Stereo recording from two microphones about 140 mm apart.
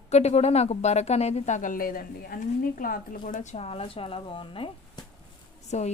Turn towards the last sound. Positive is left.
turn(degrees=55)  # may be behind; listen again after turning